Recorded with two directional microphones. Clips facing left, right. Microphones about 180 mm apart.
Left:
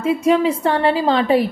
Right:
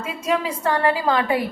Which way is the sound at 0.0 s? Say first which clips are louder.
Left 8 dB; 25° left (ahead or behind).